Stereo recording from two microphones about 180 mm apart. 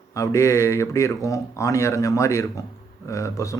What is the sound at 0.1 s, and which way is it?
Speech, 15° left (ahead or behind).